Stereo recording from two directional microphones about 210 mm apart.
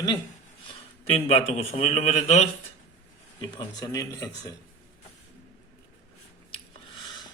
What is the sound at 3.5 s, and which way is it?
Speech, 20° left (ahead or behind).